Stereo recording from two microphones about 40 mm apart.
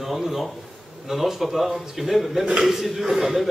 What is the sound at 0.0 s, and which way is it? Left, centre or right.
A man's voice, centre.